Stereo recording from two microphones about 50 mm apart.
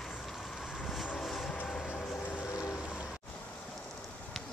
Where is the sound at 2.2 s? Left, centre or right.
Left.